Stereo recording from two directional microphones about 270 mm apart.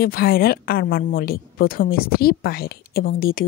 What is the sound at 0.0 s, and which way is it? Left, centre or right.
A woman's voice, left.